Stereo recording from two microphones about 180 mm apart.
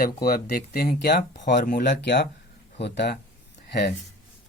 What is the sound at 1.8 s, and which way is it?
Speech, 75° left (ahead or behind).